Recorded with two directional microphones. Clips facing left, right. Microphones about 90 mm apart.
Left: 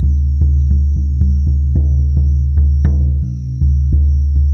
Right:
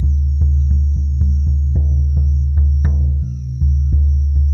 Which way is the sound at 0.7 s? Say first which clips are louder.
Left 3 dB; 5° right (ahead or behind).